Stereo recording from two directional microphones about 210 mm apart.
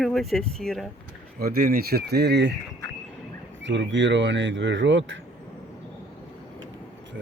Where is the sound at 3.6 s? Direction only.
60° right (ahead or behind).